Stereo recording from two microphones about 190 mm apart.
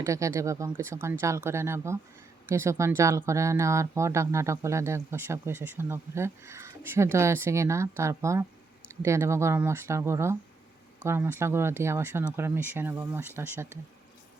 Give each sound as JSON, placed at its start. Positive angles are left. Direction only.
{"t": 0.0, "sound": "speech", "side_deg": -15}